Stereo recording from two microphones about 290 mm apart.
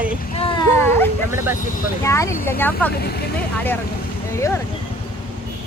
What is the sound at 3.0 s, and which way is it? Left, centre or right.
Speech, left.